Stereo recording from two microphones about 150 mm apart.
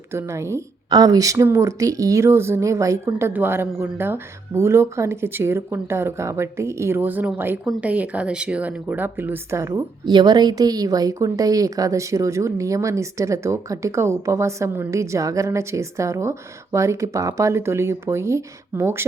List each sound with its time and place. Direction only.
0.1 s speech: 15° right (ahead or behind)